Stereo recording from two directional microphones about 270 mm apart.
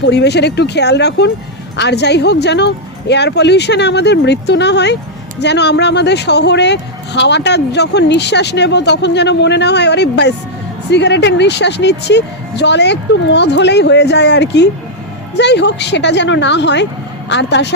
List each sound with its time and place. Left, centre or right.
0.0 s a woman's voice: left